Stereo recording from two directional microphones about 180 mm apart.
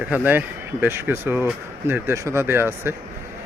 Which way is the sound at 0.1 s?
10° right (ahead or behind).